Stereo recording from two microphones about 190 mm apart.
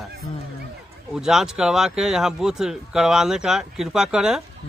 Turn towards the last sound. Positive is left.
turn(degrees=-5)  # may be behind; listen again after turning